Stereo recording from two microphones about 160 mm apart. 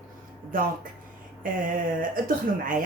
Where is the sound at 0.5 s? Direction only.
60° right (ahead or behind).